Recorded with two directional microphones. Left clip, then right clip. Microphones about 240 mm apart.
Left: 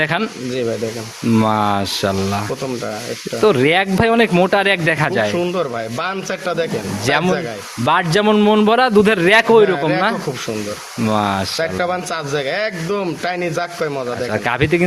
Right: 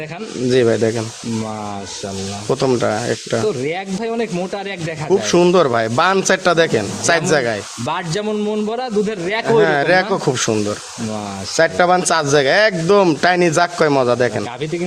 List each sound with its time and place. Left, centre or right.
1.4 s speech: left
3.4 s a man's voice: left
5.3 s speech: right
7.9 s a man's voice: centre
9.7 s speech: right
11.5 s speech: right
14.6 s a man's voice: left